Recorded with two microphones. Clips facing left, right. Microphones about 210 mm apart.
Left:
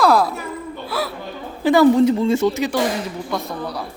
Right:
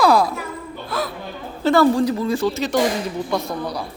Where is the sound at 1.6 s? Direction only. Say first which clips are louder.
Left 3 dB; 15° left (ahead or behind).